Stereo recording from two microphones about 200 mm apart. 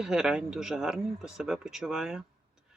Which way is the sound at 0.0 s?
5° right (ahead or behind).